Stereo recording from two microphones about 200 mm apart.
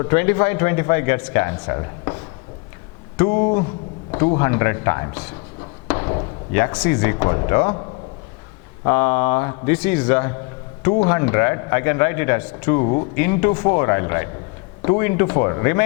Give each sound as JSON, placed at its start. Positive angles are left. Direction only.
{"t": 0.0, "sound": "speech", "side_deg": 15}
{"t": 3.2, "sound": "a man's voice", "side_deg": 20}
{"t": 5.9, "sound": "a sound", "side_deg": 25}
{"t": 6.5, "sound": "a man's voice", "side_deg": 15}
{"t": 12.8, "sound": "speech", "side_deg": 30}
{"t": 13.1, "sound": "a man's voice", "side_deg": 15}